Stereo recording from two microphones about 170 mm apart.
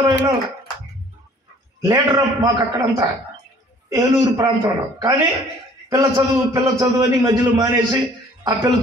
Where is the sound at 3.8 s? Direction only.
20° right (ahead or behind).